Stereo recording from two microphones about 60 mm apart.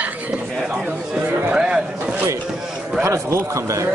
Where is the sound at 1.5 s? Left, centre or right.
Centre.